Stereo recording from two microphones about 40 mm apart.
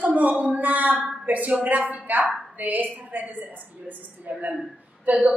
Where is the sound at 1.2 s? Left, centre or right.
Right.